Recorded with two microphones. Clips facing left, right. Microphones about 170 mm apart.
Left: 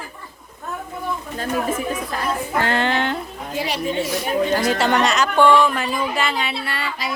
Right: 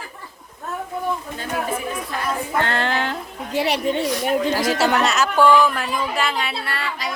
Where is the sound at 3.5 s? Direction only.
70° right (ahead or behind).